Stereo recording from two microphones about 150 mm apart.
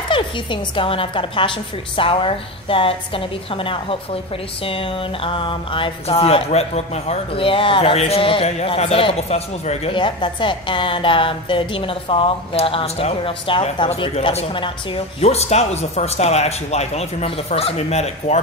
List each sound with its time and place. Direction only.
0.1 s speech: 35° left (ahead or behind)